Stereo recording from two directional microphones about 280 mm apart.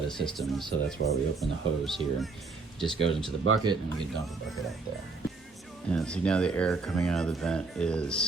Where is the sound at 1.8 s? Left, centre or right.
Centre.